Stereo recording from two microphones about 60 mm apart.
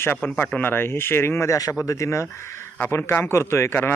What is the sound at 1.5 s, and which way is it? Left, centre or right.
Speech, left.